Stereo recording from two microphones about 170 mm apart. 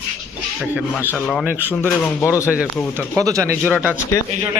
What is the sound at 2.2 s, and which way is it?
Speech, 15° left (ahead or behind).